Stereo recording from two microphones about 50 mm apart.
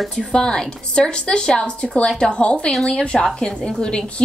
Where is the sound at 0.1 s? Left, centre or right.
Centre.